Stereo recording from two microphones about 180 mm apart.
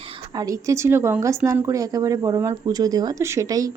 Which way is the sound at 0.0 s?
30° right (ahead or behind).